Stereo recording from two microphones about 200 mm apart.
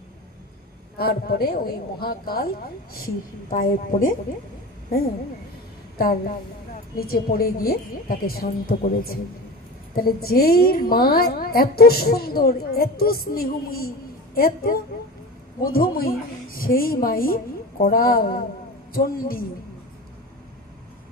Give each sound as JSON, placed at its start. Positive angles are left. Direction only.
{"t": 0.9, "sound": "a woman's voice", "side_deg": 50}
{"t": 7.0, "sound": "a woman's voice", "side_deg": 50}